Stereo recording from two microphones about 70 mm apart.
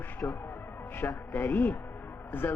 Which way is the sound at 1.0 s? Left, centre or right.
Left.